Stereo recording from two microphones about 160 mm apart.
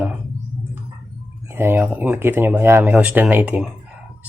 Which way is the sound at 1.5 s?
15° right (ahead or behind).